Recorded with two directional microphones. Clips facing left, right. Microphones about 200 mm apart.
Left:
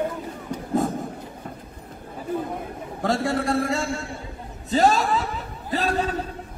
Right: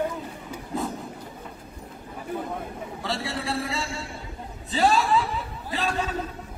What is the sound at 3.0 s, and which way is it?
A man's voice, 50° left (ahead or behind).